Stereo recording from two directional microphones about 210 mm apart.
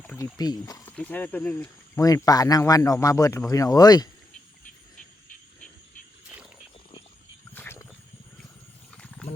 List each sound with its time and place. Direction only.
0.0 s wild animals: 10° left (ahead or behind)
0.3 s speech: 20° left (ahead or behind)
7.5 s wild animals: 10° left (ahead or behind)